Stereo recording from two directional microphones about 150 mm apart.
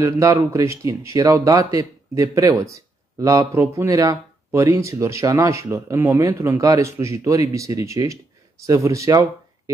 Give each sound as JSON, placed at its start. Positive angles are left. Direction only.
{"t": 0.0, "sound": "speech", "side_deg": -20}